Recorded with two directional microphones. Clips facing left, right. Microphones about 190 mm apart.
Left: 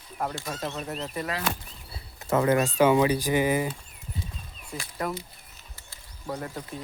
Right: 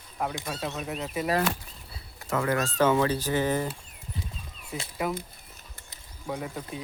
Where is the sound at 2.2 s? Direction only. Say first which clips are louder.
Left 5 dB; 20° left (ahead or behind).